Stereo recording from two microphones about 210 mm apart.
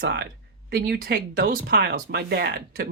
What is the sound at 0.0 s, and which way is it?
Speech, 50° right (ahead or behind).